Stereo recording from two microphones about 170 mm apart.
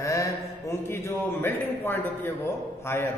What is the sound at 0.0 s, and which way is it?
A man's voice, 20° left (ahead or behind).